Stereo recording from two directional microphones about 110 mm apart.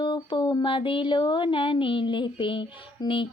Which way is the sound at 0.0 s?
45° left (ahead or behind).